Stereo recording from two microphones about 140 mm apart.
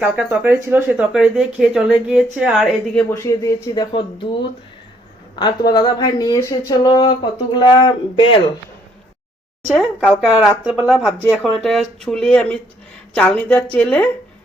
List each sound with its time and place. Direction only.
0.0 s speech: 10° right (ahead or behind)
2.9 s a woman's voice: 10° left (ahead or behind)
3.2 s speech: 25° left (ahead or behind)
5.4 s speech: 30° left (ahead or behind)
9.7 s a woman's voice: 5° right (ahead or behind)